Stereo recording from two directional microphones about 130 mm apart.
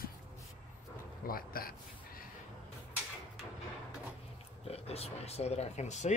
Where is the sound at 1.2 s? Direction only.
90° left.